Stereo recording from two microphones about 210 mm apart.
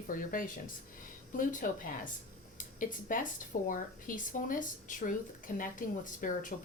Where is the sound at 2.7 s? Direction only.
40° left (ahead or behind).